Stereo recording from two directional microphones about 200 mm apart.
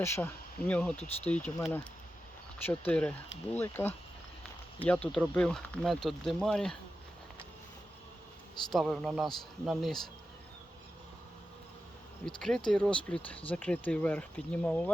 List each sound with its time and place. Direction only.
0.0 s speech: 10° left (ahead or behind)
0.9 s speech: 30° left (ahead or behind)
1.3 s speech: 5° left (ahead or behind)
8.7 s speech: centre (ahead or behind)
12.2 s speech: centre (ahead or behind)